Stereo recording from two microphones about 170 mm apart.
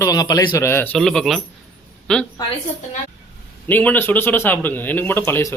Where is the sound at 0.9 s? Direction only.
5° left (ahead or behind).